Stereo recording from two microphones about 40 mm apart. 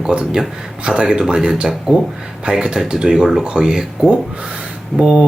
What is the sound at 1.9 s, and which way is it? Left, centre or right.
Speech, right.